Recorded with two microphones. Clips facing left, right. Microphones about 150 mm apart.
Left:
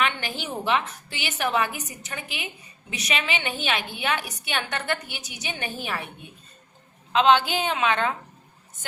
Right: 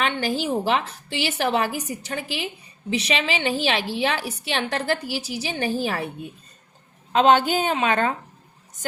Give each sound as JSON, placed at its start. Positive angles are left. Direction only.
{"t": 0.0, "sound": "a woman's voice", "side_deg": -40}
{"t": 7.1, "sound": "a woman's voice", "side_deg": -45}